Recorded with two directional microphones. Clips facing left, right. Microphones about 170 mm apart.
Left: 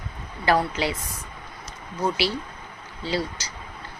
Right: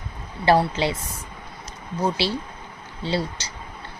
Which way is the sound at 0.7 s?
25° right (ahead or behind).